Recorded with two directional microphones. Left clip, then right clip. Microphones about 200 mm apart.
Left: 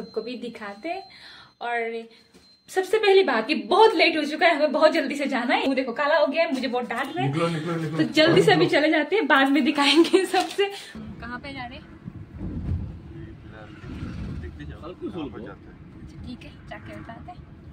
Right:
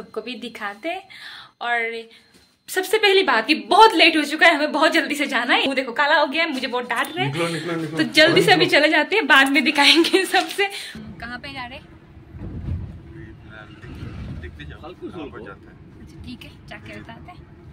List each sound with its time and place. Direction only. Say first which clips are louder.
0.1 s a woman's voice: right 2 dB; 5° left (ahead or behind)
11.1 s music: right 3 dB; 5° right (ahead or behind)
16.3 s a woman's voice: right 2 dB; centre (ahead or behind)